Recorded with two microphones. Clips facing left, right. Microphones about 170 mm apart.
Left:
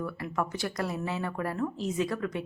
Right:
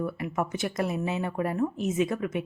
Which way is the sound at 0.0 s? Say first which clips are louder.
Right 3 dB; 20° right (ahead or behind).